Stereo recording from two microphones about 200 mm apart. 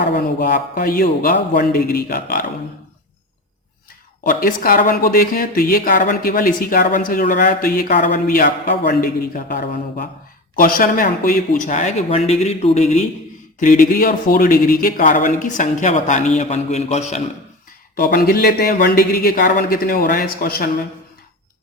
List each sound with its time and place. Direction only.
0.3 s speech: 45° left (ahead or behind)
4.2 s speech: 45° left (ahead or behind)
17.9 s speech: 50° left (ahead or behind)